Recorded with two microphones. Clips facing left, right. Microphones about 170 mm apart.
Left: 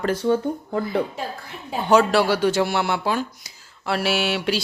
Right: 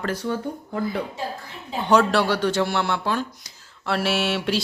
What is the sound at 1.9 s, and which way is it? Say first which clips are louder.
Speech: left 2 dB; 5° left (ahead or behind).